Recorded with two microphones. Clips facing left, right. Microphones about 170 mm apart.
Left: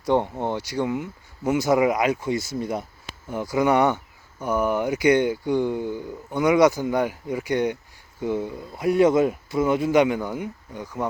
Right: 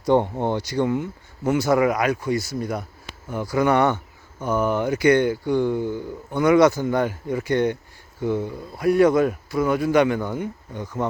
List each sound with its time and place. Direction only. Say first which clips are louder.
0.0 s speech: right 3 dB; centre (ahead or behind)
1.5 s speech: right 1 dB; 20° left (ahead or behind)